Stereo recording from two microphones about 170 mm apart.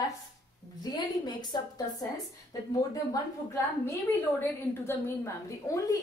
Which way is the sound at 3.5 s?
15° left (ahead or behind).